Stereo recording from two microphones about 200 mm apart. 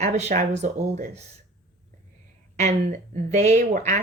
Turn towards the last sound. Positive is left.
turn(degrees=-35)  # may be behind; listen again after turning